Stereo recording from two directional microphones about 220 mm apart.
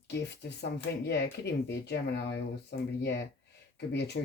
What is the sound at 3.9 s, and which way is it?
Speech, 50° left (ahead or behind).